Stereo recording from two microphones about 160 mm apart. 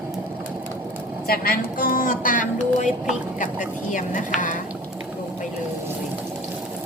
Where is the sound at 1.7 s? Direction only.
60° left (ahead or behind).